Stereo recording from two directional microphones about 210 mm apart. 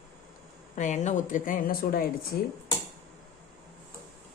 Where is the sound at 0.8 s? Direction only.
35° left (ahead or behind).